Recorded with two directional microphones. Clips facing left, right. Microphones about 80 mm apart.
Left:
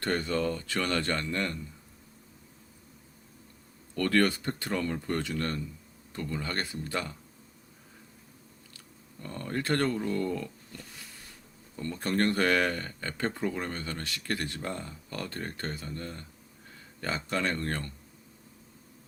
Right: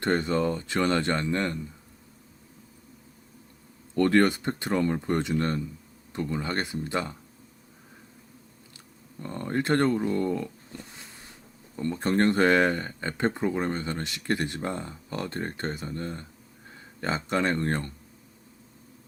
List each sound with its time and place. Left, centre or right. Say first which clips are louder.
0.0 s speech: right 4 dB; right
3.9 s speech: right 5 dB; right
9.1 s speech: right 5 dB; right